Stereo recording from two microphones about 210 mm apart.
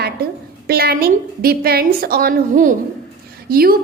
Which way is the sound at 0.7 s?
45° right (ahead or behind).